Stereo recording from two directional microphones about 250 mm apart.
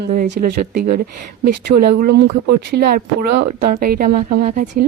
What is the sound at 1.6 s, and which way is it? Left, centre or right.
Speech, right.